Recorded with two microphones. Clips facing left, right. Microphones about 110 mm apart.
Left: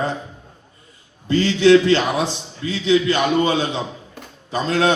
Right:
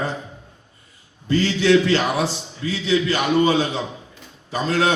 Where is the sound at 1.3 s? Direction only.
30° left (ahead or behind).